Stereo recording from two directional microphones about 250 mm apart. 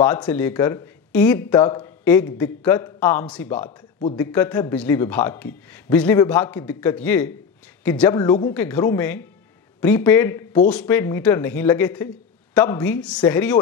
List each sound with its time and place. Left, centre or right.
0.0 s a man's voice: centre
4.0 s speech: centre
4.3 s a man's voice: centre